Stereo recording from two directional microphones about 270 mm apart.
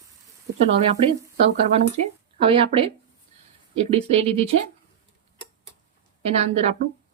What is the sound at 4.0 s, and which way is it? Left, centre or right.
Speech, right.